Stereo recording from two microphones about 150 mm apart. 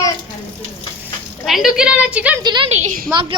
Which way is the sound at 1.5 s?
Centre (ahead or behind).